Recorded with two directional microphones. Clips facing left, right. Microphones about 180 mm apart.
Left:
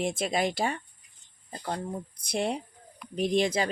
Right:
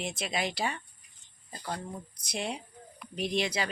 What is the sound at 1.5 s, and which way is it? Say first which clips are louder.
Speech: left 4 dB; 35° left (ahead or behind).